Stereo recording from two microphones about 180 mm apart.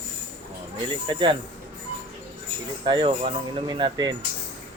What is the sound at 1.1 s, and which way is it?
Speech, 25° right (ahead or behind).